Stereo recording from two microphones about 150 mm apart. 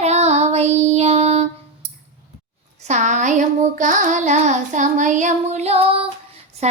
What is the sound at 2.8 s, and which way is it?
Child singing, 50° right (ahead or behind).